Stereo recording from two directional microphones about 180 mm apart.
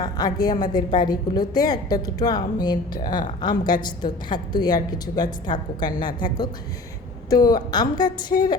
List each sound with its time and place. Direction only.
0.0 s a woman's voice: 20° left (ahead or behind)
7.3 s a woman's voice: 20° left (ahead or behind)